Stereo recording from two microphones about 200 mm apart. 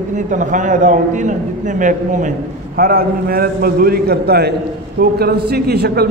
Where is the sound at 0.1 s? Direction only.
40° right (ahead or behind).